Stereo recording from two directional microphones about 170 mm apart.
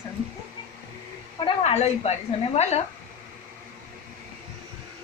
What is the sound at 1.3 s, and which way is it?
Speech, 35° left (ahead or behind).